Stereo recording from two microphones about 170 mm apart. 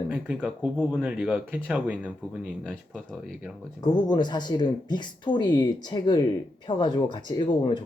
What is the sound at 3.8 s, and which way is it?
Speech, 25° left (ahead or behind).